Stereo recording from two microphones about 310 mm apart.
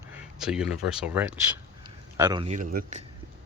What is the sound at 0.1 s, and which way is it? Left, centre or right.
Speech, centre.